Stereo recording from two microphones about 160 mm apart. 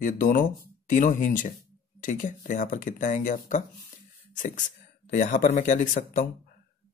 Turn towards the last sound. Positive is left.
turn(degrees=55)  # may be behind; listen again after turning